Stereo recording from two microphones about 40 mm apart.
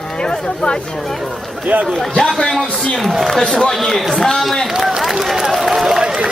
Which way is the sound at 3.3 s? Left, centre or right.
Centre.